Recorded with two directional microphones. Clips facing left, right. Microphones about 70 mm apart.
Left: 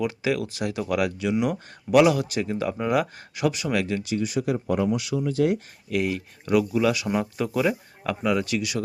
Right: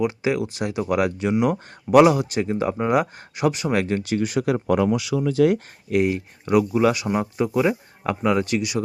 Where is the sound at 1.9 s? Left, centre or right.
Right.